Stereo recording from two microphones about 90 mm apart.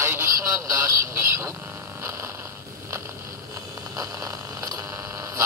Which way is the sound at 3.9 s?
40° right (ahead or behind).